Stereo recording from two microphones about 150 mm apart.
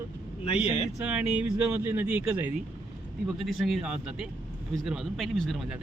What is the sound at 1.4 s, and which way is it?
Speech, 10° right (ahead or behind).